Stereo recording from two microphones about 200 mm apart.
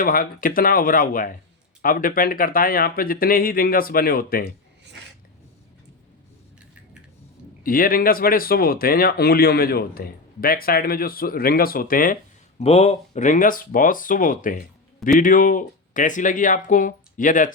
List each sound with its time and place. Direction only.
0.0 s speech: 45° left (ahead or behind)
7.6 s speech: 45° left (ahead or behind)
12.5 s speech: 30° left (ahead or behind)